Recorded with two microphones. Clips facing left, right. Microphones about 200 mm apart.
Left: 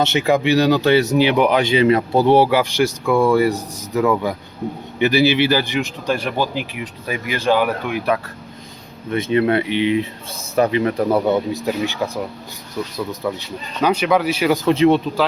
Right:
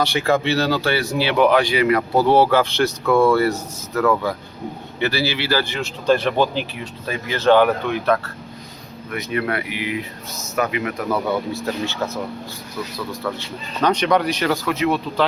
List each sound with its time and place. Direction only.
0.0 s speech: 20° left (ahead or behind)
9.0 s speech: 25° left (ahead or behind)
11.5 s speech: 15° left (ahead or behind)
13.2 s speech: 15° left (ahead or behind)
14.5 s speech: 25° left (ahead or behind)